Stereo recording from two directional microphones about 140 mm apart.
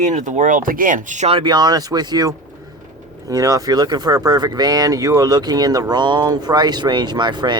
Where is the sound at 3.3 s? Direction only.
25° right (ahead or behind).